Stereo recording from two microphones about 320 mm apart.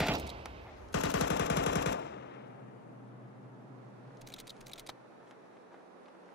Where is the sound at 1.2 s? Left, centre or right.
Left.